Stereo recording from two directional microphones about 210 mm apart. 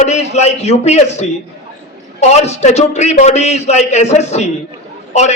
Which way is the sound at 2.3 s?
30° left (ahead or behind).